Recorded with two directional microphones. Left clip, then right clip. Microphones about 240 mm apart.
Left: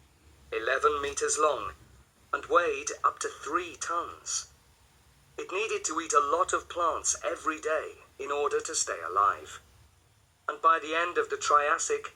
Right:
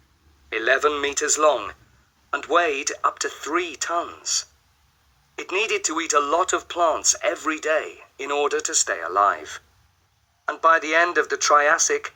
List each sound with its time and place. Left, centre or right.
0.5 s speech: right
5.4 s speech: right